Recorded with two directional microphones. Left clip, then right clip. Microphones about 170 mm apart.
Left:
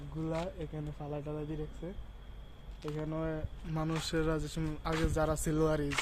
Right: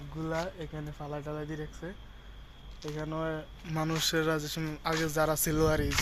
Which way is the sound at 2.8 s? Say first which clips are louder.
Right 2 dB; 20° right (ahead or behind).